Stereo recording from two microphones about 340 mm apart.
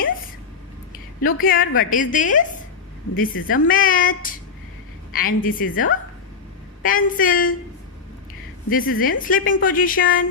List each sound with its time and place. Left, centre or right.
1.2 s a woman's voice: left
3.2 s a woman's voice: left
3.5 s a woman's voice: left
8.7 s a woman's voice: left